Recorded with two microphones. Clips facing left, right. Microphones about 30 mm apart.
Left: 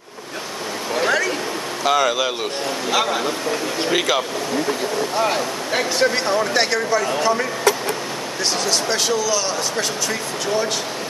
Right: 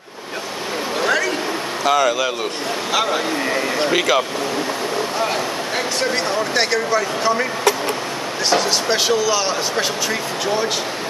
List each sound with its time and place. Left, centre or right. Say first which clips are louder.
0.9 s a sound: even; centre
1.9 s speech: right 1 dB; centre
8.5 s speech: right 4 dB; centre